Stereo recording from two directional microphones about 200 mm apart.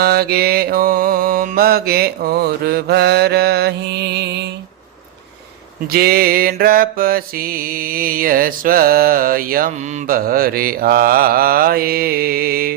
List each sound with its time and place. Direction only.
0.0 s mantra: 50° right (ahead or behind)
5.9 s mantra: 50° right (ahead or behind)